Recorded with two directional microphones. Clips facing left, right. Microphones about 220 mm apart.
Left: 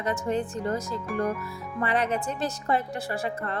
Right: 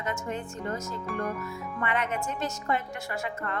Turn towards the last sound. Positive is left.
turn(degrees=35)  # may be behind; listen again after turning